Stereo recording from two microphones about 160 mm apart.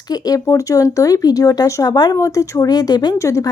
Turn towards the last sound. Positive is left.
turn(degrees=20)  # may be behind; listen again after turning